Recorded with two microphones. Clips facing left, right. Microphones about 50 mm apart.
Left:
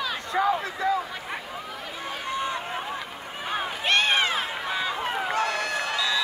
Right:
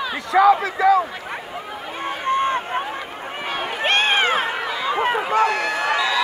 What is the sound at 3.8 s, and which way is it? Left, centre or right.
Run, right.